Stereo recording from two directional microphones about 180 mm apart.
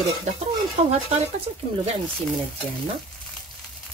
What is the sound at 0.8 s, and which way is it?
Speech, 35° right (ahead or behind).